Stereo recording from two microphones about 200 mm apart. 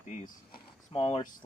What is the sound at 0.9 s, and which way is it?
Speech, 30° left (ahead or behind).